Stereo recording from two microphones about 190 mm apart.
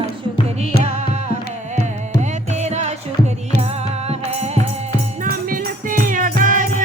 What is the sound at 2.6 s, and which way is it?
Music, 35° right (ahead or behind).